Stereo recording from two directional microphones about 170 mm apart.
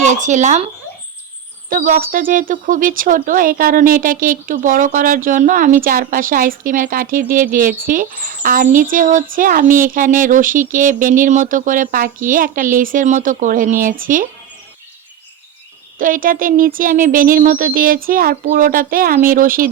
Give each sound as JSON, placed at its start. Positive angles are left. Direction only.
{"t": 0.0, "sound": "speech", "side_deg": -45}
{"t": 1.7, "sound": "speech", "side_deg": -55}
{"t": 16.0, "sound": "speech", "side_deg": -55}